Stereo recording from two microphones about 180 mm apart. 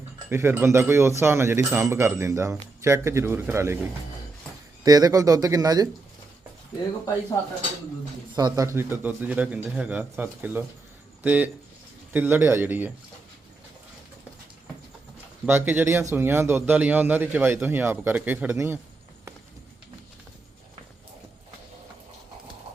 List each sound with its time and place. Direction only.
0.3 s a man's voice: 15° right (ahead or behind)
4.8 s speech: 20° right (ahead or behind)
8.4 s a man's voice: 20° right (ahead or behind)
15.4 s a man's voice: 10° right (ahead or behind)